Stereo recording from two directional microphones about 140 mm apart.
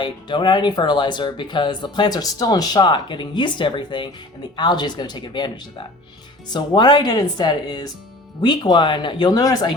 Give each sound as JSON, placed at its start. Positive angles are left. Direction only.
{"t": 0.0, "sound": "speech", "side_deg": 35}